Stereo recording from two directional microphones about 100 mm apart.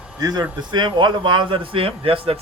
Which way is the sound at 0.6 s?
50° right (ahead or behind).